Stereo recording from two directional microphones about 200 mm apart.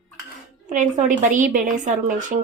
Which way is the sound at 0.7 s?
40° right (ahead or behind).